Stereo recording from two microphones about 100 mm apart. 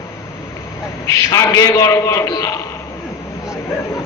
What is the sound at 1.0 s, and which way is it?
A man's voice, 35° left (ahead or behind).